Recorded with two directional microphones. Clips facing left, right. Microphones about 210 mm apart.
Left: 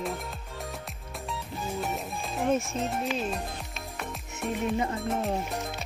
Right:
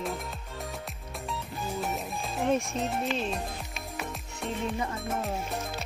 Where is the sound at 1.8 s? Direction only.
Centre (ahead or behind).